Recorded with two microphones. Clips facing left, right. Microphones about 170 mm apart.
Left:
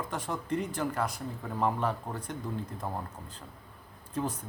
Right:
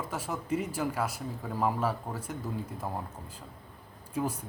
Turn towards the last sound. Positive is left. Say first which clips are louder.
# right 1 dB
turn(degrees=-10)  # may be behind; listen again after turning